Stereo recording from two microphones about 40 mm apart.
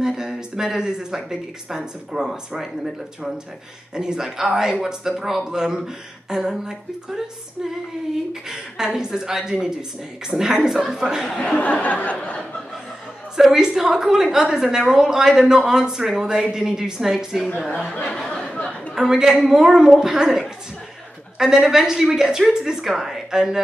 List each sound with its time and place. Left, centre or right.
0.0 s a woman's voice: centre
3.9 s a woman's voice: centre
8.3 s a woman's voice: centre
11.5 s a sound: left
13.4 s a woman's voice: centre
18.5 s chatter: left
18.9 s a woman's voice: centre